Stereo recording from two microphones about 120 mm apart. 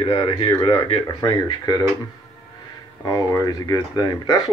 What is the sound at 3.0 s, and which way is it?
Speech, 30° left (ahead or behind).